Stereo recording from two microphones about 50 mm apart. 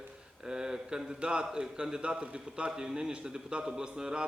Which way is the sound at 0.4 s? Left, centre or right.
Centre.